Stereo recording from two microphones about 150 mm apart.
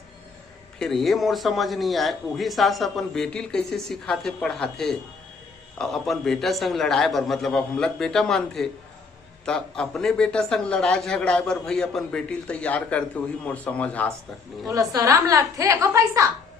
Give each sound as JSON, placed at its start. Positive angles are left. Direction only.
{"t": 0.8, "sound": "a man's voice", "side_deg": 0}
{"t": 14.7, "sound": "a woman's voice", "side_deg": -20}